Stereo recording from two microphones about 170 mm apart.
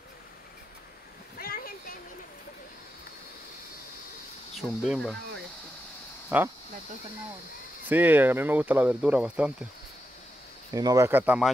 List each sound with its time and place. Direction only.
1.4 s a sound: 60° left (ahead or behind)
4.6 s speech: centre (ahead or behind)
6.2 s speech: 10° right (ahead or behind)
7.9 s speech: 10° right (ahead or behind)
10.7 s speech: 20° right (ahead or behind)
11.1 s speech: 10° right (ahead or behind)